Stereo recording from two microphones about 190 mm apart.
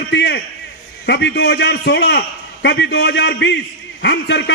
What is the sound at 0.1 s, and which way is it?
A man's voice, 65° left (ahead or behind).